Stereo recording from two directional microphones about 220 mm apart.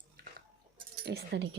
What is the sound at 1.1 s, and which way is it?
Speech, 50° right (ahead or behind).